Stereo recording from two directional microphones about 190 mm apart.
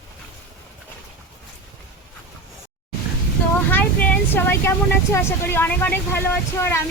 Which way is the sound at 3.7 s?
10° left (ahead or behind).